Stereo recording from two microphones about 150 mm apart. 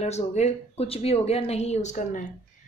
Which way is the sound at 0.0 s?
50° left (ahead or behind).